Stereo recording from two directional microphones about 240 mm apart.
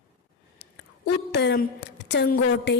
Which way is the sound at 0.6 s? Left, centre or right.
Left.